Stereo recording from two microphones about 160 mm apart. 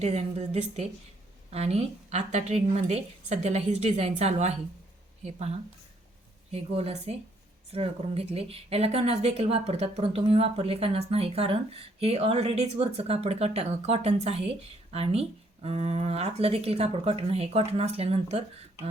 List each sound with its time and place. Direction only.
0.0 s a woman's voice: 40° right (ahead or behind)
6.5 s speech: 40° right (ahead or behind)